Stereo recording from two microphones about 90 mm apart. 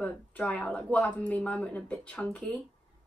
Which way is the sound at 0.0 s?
15° left (ahead or behind).